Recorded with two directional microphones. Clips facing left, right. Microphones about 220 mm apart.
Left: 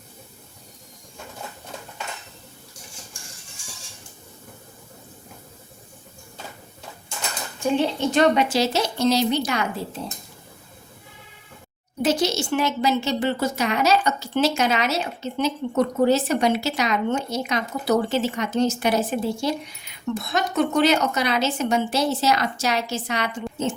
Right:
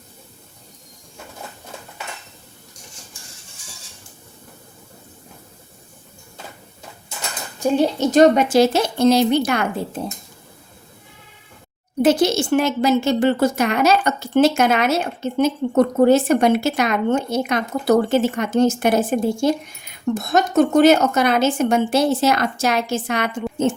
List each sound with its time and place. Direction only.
7.6 s a woman's voice: 40° right (ahead or behind)
12.0 s a woman's voice: 55° right (ahead or behind)